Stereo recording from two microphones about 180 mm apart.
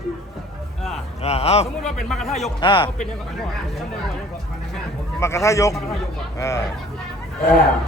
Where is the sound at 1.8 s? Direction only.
Centre (ahead or behind).